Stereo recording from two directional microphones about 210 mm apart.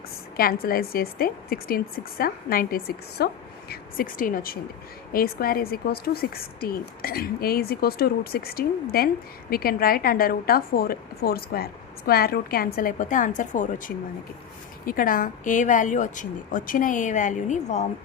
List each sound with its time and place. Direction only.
0.3 s a woman's voice: 45° left (ahead or behind)